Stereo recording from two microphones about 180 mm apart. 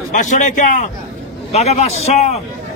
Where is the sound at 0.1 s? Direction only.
45° left (ahead or behind).